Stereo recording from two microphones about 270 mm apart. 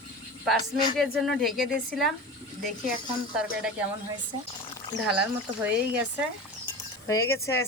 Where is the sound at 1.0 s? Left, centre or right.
Centre.